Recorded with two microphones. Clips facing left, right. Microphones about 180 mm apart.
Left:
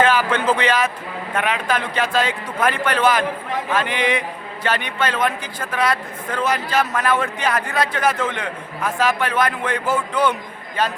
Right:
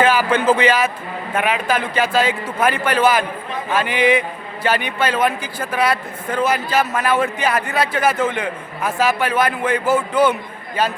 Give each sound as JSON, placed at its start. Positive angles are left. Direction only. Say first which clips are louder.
{"t": 0.0, "sound": "a man's voice", "louder": "right 2 dB", "side_deg": -5}